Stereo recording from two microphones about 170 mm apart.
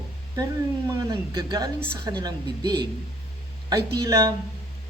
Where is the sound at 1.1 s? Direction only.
25° right (ahead or behind).